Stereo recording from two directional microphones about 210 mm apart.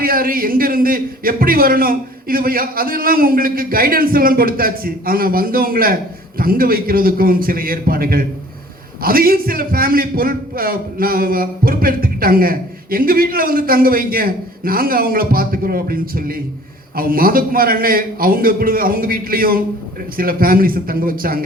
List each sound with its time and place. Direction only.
0.0 s a man's voice: 45° right (ahead or behind)